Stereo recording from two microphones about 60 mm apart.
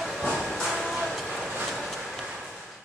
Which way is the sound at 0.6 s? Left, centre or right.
Centre.